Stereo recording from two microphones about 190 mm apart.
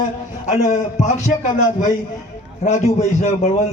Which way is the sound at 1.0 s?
40° left (ahead or behind).